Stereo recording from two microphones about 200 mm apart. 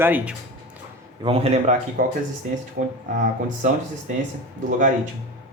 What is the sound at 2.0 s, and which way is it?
Speech, 45° right (ahead or behind).